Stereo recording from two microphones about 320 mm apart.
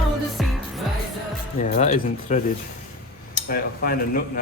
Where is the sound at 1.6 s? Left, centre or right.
Left.